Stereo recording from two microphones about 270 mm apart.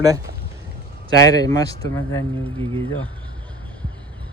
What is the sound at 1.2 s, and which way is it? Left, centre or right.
Speech, centre.